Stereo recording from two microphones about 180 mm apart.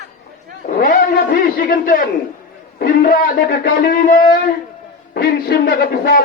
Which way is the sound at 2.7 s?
55° left (ahead or behind).